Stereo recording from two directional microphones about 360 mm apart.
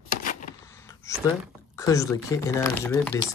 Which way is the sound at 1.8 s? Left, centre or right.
Centre.